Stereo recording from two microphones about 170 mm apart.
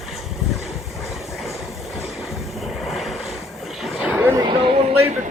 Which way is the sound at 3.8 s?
Centre (ahead or behind).